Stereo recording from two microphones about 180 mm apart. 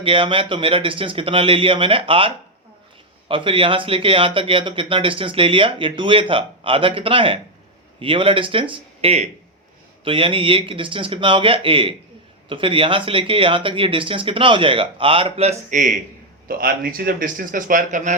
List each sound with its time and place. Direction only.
0.0 s speech: 30° right (ahead or behind)
16.5 s speech: 55° right (ahead or behind)